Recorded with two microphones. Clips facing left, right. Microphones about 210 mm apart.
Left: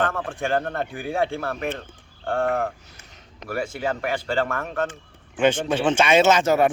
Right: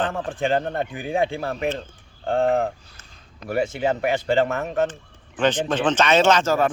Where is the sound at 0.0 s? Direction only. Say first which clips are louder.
Even; 30° right (ahead or behind).